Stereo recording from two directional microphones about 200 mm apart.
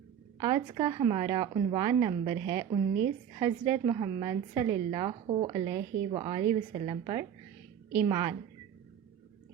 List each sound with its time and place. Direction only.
0.3 s a woman's voice: 20° right (ahead or behind)